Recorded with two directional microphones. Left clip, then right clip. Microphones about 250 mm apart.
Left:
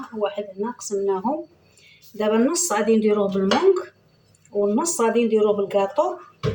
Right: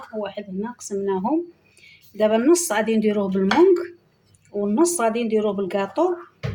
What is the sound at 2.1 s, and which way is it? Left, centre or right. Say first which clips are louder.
Speech: right 3 dB; right.